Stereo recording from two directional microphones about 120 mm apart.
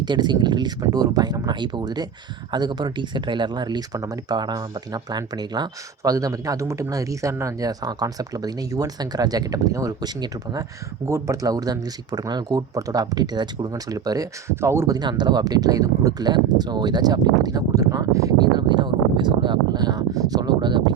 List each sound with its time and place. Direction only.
0.0 s speech: 35° right (ahead or behind); by 14.9 s 20° right (ahead or behind)
14.9 s speech: 35° right (ahead or behind)